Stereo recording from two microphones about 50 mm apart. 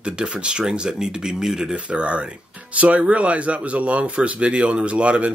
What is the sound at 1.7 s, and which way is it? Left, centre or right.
Speech, right.